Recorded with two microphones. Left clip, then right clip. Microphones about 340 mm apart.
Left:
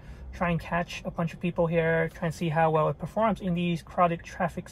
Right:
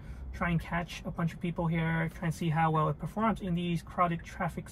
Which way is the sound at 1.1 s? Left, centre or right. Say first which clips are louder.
Left 5 dB; left.